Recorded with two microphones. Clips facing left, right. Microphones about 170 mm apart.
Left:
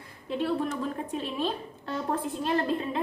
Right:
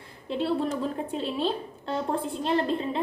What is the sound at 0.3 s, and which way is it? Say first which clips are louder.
A woman's voice: right 2 dB; 30° right (ahead or behind).